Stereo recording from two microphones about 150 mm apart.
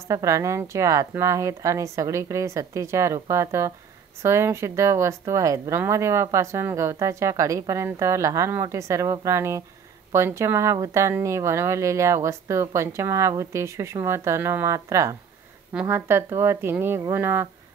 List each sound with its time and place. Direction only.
0.1 s speech: 20° right (ahead or behind)